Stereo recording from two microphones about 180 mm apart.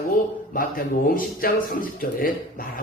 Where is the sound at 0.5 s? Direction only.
50° left (ahead or behind).